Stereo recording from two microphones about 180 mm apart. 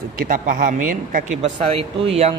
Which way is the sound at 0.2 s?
50° right (ahead or behind).